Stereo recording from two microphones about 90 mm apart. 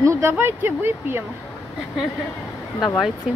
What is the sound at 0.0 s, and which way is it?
Speech, 30° right (ahead or behind).